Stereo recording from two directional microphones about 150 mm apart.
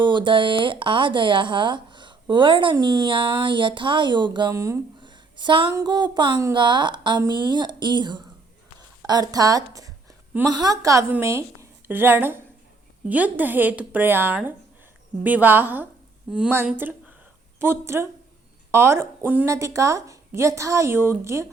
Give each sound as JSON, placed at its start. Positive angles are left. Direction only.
{"t": 0.0, "sound": "speech", "side_deg": -30}
{"t": 4.9, "sound": "a sound", "side_deg": -30}
{"t": 5.7, "sound": "a woman's voice", "side_deg": -25}